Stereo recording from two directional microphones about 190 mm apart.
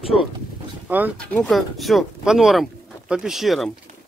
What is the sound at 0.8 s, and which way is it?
Speech, 10° right (ahead or behind).